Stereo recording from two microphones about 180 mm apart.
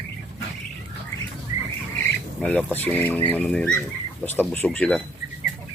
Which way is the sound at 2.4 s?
5° left (ahead or behind).